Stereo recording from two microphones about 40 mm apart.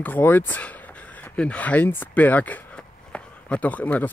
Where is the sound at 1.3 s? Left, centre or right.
Left.